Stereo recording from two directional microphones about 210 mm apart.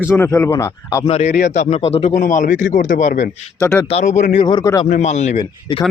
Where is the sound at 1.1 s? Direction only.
35° left (ahead or behind).